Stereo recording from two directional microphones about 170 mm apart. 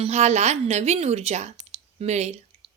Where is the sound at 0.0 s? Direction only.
40° right (ahead or behind).